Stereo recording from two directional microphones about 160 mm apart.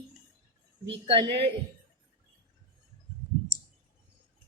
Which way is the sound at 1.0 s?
35° right (ahead or behind).